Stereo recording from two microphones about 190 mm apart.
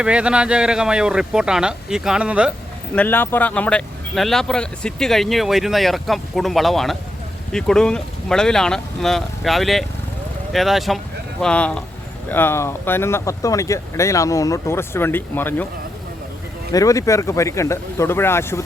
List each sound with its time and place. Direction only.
0.0 s speech: 5° right (ahead or behind)
2.9 s speech: 10° left (ahead or behind)
16.7 s speech: 15° left (ahead or behind)